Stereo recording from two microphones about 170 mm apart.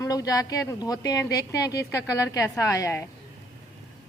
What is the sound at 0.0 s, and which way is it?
Speech, 20° left (ahead or behind).